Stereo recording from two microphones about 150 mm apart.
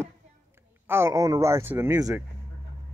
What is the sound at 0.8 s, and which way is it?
Speech, 15° right (ahead or behind).